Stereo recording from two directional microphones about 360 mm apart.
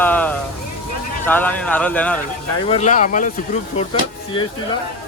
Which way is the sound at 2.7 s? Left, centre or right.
Centre.